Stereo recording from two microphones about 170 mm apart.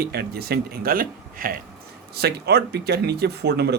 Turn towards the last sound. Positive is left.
turn(degrees=-75)  # may be behind; listen again after turning